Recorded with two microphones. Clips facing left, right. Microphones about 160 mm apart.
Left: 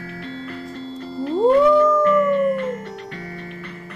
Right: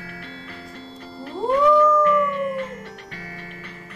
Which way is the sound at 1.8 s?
40° left (ahead or behind).